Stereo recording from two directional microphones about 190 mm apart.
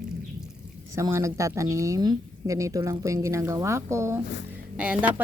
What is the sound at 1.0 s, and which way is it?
Speech, 15° right (ahead or behind).